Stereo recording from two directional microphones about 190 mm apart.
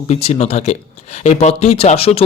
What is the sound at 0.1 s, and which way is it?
A man's voice, 35° left (ahead or behind).